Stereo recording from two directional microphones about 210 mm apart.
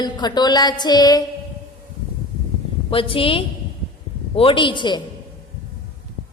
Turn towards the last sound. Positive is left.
turn(degrees=20)  # may be behind; listen again after turning